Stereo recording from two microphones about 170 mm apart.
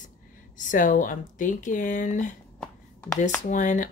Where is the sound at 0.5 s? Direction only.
50° left (ahead or behind).